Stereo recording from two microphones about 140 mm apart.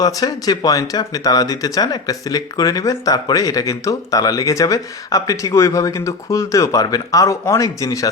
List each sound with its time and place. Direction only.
0.0 s speech: 25° left (ahead or behind)